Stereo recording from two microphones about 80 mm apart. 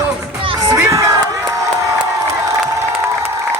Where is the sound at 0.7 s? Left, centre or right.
Right.